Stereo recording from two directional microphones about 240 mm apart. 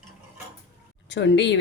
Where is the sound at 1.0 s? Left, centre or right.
Left.